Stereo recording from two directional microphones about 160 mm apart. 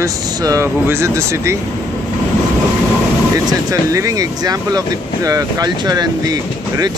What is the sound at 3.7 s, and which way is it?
Speech, 20° right (ahead or behind).